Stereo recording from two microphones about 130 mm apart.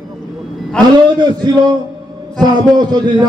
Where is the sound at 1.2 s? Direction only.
30° right (ahead or behind).